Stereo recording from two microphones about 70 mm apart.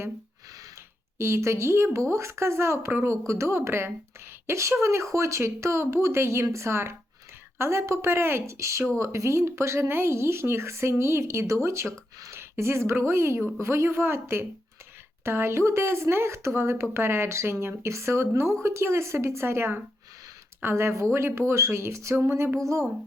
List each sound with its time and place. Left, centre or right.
1.2 s speech: right